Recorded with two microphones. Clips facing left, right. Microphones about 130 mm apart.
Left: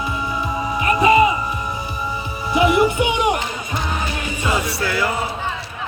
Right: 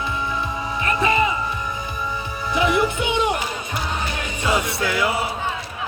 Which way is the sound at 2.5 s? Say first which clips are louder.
Left 4 dB; 15° left (ahead or behind).